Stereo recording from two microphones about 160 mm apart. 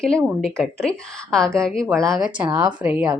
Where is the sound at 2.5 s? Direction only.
25° right (ahead or behind).